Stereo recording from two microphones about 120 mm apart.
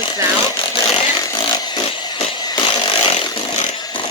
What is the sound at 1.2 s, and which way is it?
Chainsaw, 35° left (ahead or behind).